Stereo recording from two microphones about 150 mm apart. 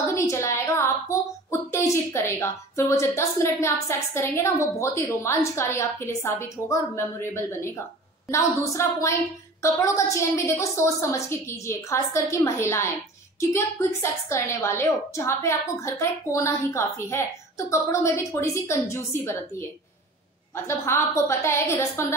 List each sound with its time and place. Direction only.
0.1 s a sound: 20° left (ahead or behind)
1.5 s a woman's voice: 15° left (ahead or behind)
20.6 s a woman's voice: 15° left (ahead or behind)